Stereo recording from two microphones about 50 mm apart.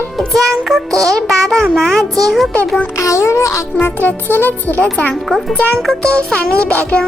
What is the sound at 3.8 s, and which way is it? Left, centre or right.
A child's voice, left.